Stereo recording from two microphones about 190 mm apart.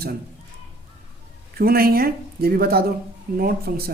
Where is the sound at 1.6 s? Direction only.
55° right (ahead or behind).